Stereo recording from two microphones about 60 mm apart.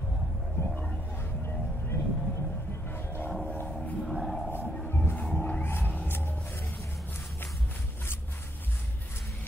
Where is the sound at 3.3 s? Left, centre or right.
Centre.